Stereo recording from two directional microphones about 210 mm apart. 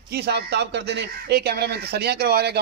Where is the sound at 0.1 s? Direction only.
50° right (ahead or behind).